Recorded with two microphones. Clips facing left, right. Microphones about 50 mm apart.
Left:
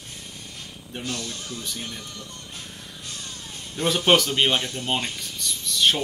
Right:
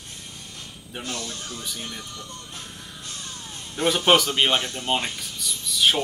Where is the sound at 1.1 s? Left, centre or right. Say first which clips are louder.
Left 1 dB; centre.